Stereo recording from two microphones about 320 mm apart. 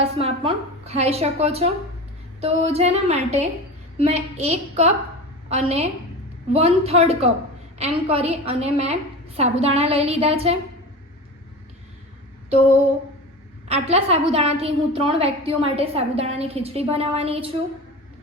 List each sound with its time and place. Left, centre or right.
0.0 s a woman's voice: centre
13.7 s a woman's voice: centre